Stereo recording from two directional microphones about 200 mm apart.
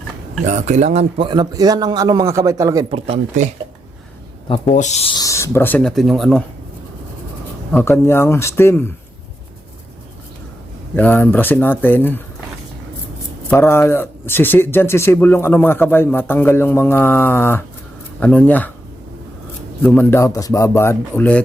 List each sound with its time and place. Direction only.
0.4 s a man's voice: 35° right (ahead or behind); by 2.8 s 15° right (ahead or behind)
2.9 s speech: 30° right (ahead or behind)
4.7 s speech: 35° left (ahead or behind)
5.1 s speech: 15° left (ahead or behind)
7.7 s speech: 10° left (ahead or behind)
10.9 s speech: 10° left (ahead or behind)
13.5 s speech: 10° left (ahead or behind)
19.8 s speech: 10° left (ahead or behind)